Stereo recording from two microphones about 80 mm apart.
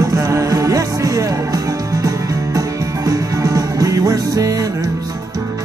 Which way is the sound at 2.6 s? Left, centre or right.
Right.